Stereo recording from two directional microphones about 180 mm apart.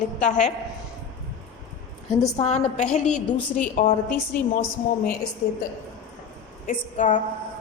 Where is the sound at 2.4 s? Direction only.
35° left (ahead or behind).